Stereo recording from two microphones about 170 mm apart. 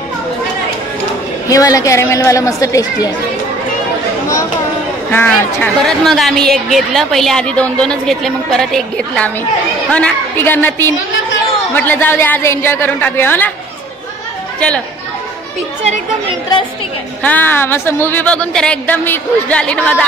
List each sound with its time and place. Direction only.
1.5 s speech: 20° left (ahead or behind)
5.1 s a woman's voice: 10° left (ahead or behind)
17.2 s a woman's voice: 10° left (ahead or behind)